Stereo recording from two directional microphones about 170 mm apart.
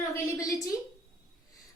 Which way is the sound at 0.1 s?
20° left (ahead or behind).